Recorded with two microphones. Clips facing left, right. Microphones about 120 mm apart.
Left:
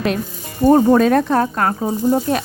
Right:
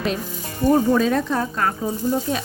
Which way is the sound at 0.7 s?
50° left (ahead or behind).